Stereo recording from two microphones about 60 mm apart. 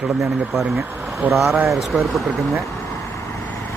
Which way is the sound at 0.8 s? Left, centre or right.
Right.